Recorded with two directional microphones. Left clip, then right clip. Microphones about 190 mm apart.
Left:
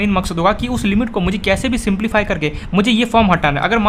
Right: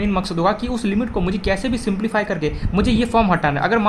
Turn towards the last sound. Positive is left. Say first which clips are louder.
# left 3 dB
turn(degrees=25)  # may be behind; listen again after turning